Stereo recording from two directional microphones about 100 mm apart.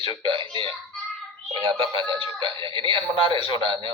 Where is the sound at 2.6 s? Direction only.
60° right (ahead or behind).